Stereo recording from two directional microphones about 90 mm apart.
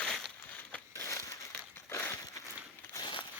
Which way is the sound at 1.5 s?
25° left (ahead or behind).